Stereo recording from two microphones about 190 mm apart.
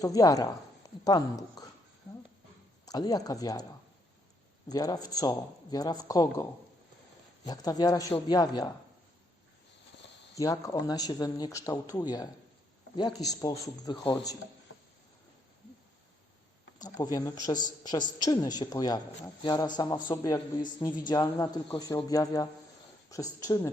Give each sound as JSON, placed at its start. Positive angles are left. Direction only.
{"t": 0.0, "sound": "a woman's voice", "side_deg": 20}
{"t": 2.8, "sound": "a woman's voice", "side_deg": 20}
{"t": 4.7, "sound": "a woman's voice", "side_deg": 20}
{"t": 10.3, "sound": "a woman's voice", "side_deg": 15}
{"t": 16.7, "sound": "a woman's voice", "side_deg": 20}